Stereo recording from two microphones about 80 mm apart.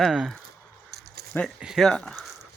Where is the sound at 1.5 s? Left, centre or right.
Centre.